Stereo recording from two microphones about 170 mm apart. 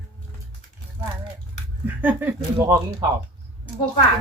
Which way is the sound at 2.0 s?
10° right (ahead or behind).